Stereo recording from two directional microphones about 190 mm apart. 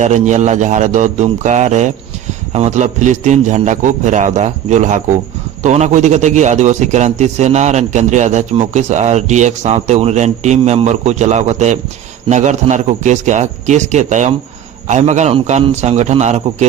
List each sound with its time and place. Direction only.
0.0 s a man's voice: 40° right (ahead or behind)